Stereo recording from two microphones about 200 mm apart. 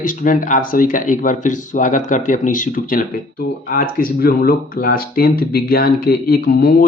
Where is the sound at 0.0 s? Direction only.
40° left (ahead or behind).